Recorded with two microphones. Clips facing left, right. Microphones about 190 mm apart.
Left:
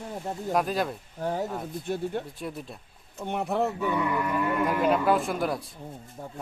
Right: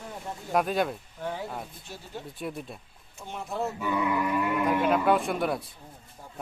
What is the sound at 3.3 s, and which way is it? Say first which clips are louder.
Speech: left 7 dB; 65° left (ahead or behind).